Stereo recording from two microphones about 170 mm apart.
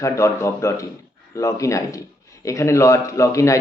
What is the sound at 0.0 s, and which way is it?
Speech, 15° left (ahead or behind).